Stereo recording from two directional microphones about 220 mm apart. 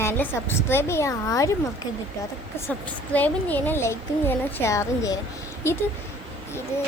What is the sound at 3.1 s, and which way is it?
A woman's voice, 5° left (ahead or behind).